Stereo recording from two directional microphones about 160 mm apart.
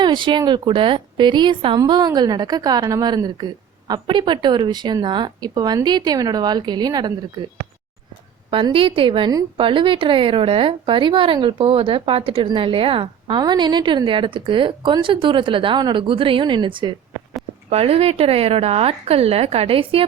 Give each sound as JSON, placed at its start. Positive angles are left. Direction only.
{"t": 0.0, "sound": "a woman's voice", "side_deg": -30}